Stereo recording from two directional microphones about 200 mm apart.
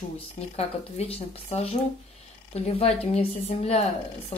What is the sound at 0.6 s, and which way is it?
A woman's voice, 30° left (ahead or behind).